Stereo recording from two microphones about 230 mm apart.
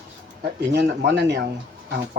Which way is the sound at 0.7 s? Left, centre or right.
Right.